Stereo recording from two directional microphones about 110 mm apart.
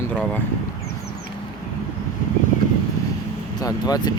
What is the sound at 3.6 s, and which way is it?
Speech, 35° left (ahead or behind).